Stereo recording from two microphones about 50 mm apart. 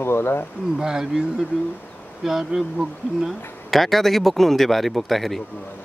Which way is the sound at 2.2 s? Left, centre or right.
Centre.